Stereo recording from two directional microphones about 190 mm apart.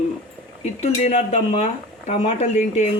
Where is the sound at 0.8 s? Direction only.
35° left (ahead or behind).